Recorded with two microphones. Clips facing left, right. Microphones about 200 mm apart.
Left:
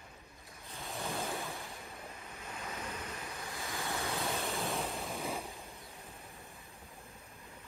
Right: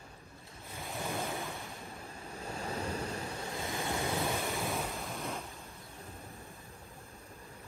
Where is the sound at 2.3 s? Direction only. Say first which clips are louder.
Right 7 dB; 30° right (ahead or behind).